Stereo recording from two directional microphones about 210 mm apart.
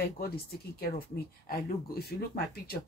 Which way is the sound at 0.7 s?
45° left (ahead or behind).